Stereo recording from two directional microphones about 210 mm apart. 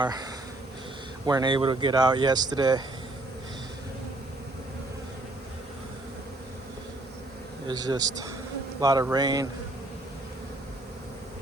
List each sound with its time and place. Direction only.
0.0 s speech: 20° right (ahead or behind)
7.7 s a man's voice: 20° right (ahead or behind)